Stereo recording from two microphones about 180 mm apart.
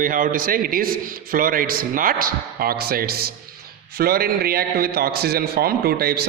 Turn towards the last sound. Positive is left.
turn(degrees=-60)  # may be behind; listen again after turning